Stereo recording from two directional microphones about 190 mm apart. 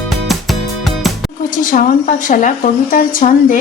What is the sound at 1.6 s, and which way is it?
Speech, 45° left (ahead or behind).